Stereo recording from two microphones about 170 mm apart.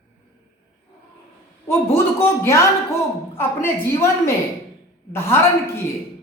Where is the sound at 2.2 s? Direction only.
15° left (ahead or behind).